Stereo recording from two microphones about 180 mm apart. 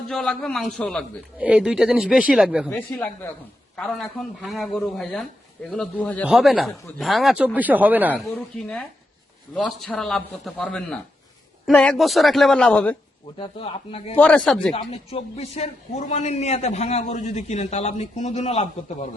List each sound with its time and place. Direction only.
0.1 s speech: centre (ahead or behind)
2.6 s speech: 10° left (ahead or behind)
6.2 s speech: 5° right (ahead or behind)
8.3 s speech: 5° left (ahead or behind)
13.4 s a man's voice: 30° left (ahead or behind)
14.2 s speech: 5° left (ahead or behind)
14.7 s a man's voice: 30° left (ahead or behind)